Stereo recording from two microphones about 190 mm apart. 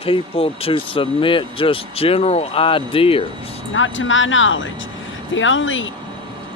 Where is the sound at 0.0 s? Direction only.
30° left (ahead or behind).